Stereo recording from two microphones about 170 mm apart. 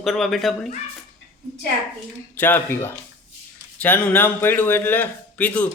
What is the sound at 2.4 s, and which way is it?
A man's voice, 10° left (ahead or behind).